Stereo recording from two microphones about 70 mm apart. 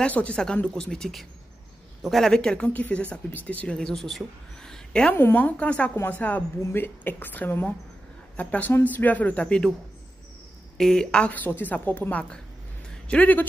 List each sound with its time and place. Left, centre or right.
0.0 s speech: centre
3.7 s speech: centre
4.6 s a sound: centre
5.1 s a woman's voice: left
10.8 s speech: centre
11.3 s a woman's voice: left